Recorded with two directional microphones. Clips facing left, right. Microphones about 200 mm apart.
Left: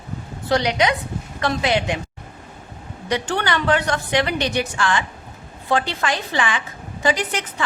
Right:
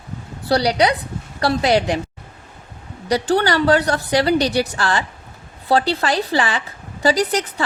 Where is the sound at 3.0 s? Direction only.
35° right (ahead or behind).